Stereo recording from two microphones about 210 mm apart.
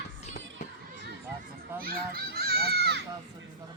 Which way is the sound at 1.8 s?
45° right (ahead or behind).